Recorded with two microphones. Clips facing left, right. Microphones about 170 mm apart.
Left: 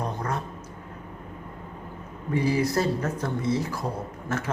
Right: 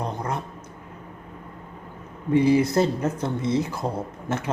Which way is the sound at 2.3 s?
20° right (ahead or behind).